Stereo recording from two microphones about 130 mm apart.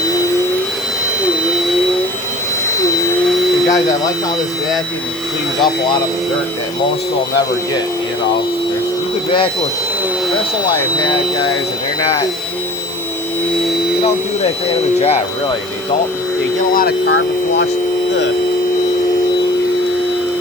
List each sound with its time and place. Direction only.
3.7 s speech: 25° left (ahead or behind)
14.0 s speech: 50° left (ahead or behind)